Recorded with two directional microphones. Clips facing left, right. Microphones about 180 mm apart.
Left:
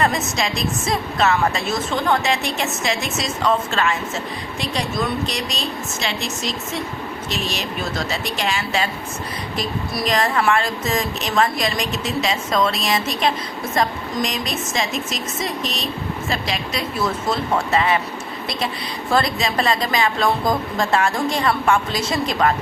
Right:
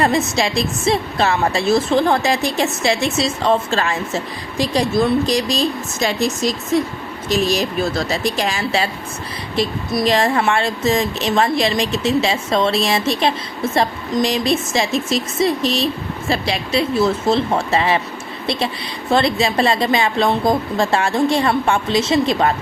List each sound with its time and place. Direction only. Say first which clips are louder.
0.0 s a woman's voice: right 4 dB; 30° right (ahead or behind)
19.1 s a woman's voice: right 4 dB; 30° right (ahead or behind)